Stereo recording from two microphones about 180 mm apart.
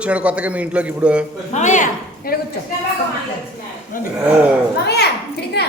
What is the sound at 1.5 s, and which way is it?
Speech, 40° left (ahead or behind).